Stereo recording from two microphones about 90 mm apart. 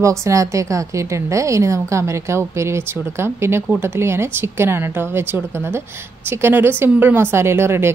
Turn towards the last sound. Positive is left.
turn(degrees=-30)  # may be behind; listen again after turning